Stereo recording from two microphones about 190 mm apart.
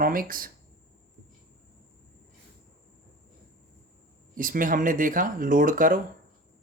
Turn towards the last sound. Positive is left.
turn(degrees=-45)  # may be behind; listen again after turning